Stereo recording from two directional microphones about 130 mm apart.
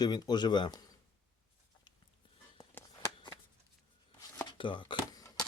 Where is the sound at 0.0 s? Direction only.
30° left (ahead or behind).